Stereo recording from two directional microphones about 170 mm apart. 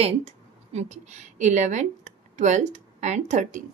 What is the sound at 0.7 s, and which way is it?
Speech, 40° right (ahead or behind).